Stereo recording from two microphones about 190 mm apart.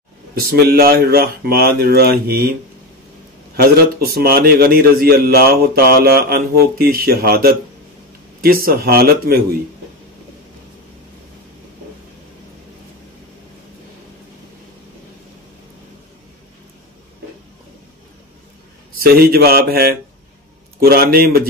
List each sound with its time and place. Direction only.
0.3 s a man's voice: 55° right (ahead or behind)
4.1 s a man's voice: 50° right (ahead or behind)
18.9 s a man's voice: 50° right (ahead or behind)